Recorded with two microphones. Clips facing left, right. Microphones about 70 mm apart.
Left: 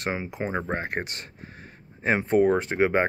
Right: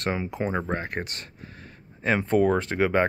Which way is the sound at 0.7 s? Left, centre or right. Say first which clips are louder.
Left 1 dB; left.